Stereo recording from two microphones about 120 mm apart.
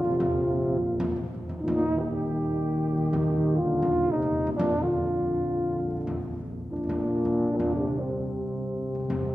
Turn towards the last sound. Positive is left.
turn(degrees=-5)  # may be behind; listen again after turning